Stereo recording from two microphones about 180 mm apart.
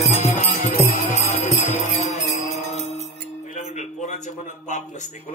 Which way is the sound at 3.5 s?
40° left (ahead or behind).